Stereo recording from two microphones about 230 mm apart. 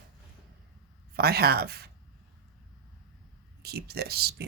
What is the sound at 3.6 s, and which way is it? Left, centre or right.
Speech, right.